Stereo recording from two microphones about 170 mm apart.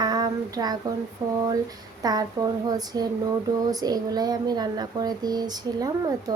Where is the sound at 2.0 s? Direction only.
20° right (ahead or behind).